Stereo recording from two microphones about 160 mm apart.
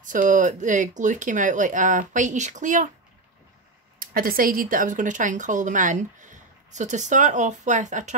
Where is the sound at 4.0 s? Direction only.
65° right (ahead or behind).